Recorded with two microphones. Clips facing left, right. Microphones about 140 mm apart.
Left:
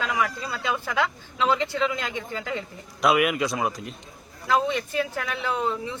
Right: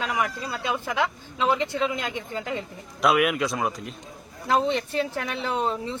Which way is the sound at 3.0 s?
Centre (ahead or behind).